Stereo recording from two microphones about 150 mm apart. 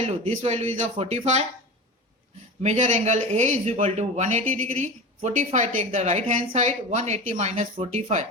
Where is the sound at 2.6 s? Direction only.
50° right (ahead or behind).